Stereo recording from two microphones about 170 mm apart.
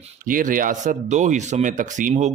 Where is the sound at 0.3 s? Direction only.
55° right (ahead or behind).